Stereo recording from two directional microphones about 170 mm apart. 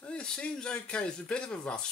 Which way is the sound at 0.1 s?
5° left (ahead or behind).